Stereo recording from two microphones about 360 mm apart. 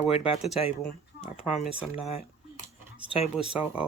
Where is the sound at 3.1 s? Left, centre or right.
Centre.